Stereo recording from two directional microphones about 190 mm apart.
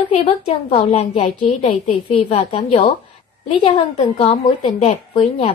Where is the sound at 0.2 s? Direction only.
30° left (ahead or behind).